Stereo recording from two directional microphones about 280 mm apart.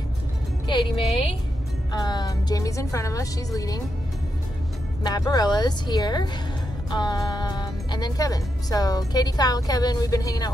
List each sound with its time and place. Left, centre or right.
0.7 s speech: centre
5.0 s speech: centre